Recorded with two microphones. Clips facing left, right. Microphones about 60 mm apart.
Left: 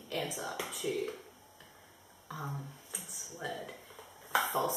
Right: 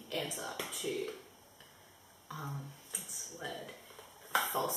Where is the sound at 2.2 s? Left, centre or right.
Centre.